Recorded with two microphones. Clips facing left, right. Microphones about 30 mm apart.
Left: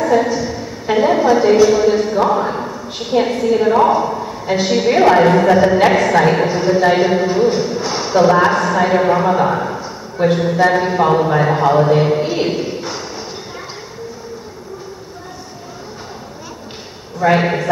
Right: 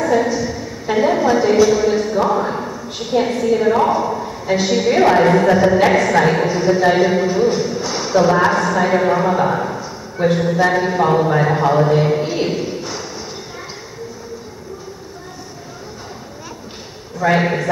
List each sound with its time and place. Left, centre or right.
0.0 s a woman's voice: centre
17.2 s a woman's voice: centre